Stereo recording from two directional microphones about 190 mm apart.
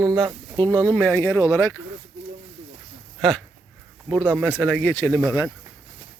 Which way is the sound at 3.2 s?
Centre (ahead or behind).